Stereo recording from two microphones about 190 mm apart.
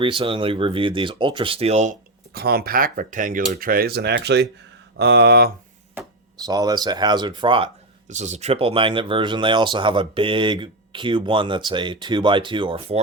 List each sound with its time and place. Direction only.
0.0 s speech: 25° right (ahead or behind)
2.3 s speech: 55° right (ahead or behind)
6.4 s speech: 20° right (ahead or behind)
8.1 s speech: 40° right (ahead or behind)